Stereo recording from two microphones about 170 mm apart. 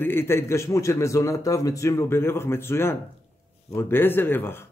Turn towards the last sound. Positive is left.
turn(degrees=15)  # may be behind; listen again after turning